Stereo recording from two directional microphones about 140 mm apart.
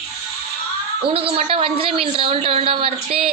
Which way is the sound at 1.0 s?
40° right (ahead or behind).